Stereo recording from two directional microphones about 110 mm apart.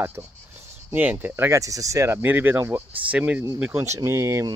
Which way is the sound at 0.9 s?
15° right (ahead or behind).